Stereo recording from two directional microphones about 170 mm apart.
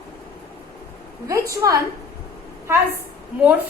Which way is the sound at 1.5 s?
20° right (ahead or behind).